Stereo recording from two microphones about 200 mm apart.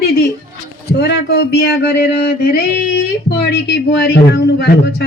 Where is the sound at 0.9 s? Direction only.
55° left (ahead or behind).